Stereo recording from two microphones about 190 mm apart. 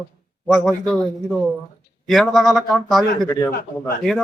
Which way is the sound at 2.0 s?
Centre (ahead or behind).